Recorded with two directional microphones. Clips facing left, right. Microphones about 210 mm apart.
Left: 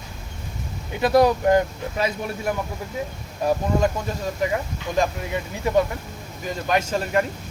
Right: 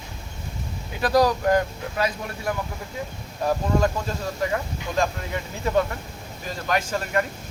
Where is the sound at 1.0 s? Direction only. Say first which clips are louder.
Left 3 dB; 25° left (ahead or behind).